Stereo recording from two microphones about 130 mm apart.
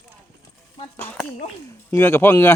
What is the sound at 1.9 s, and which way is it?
Speech, 20° left (ahead or behind).